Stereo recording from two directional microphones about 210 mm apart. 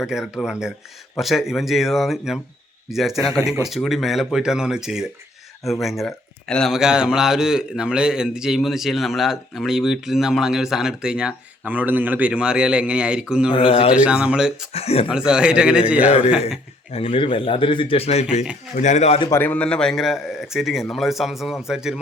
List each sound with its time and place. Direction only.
0.0 s a man's voice: centre (ahead or behind)
13.5 s speech: 25° left (ahead or behind)
13.9 s a man's voice: 5° right (ahead or behind)
14.7 s speech: 30° left (ahead or behind)
15.1 s a man's voice: 5° right (ahead or behind)
16.9 s a man's voice: 25° left (ahead or behind)
19.3 s a man's voice: 10° left (ahead or behind)